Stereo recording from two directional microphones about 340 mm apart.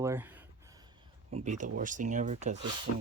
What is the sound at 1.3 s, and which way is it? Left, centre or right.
Speech, right.